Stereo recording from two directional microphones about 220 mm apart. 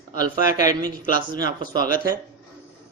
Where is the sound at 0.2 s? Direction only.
15° right (ahead or behind).